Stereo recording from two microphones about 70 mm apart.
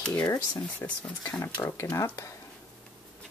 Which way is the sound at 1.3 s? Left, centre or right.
Left.